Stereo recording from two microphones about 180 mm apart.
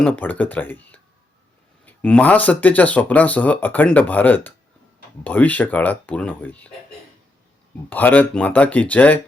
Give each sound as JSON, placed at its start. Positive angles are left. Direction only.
{"t": 0.0, "sound": "speech", "side_deg": 10}
{"t": 7.9, "sound": "speech", "side_deg": 10}